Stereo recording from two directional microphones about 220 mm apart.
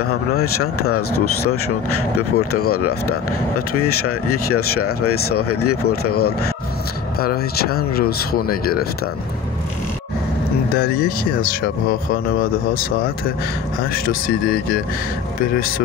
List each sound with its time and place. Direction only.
0.0 s speech: 80° left
2.1 s speech: 80° left
7.2 s speech: 45° left (ahead or behind)
10.7 s speech: 45° left (ahead or behind)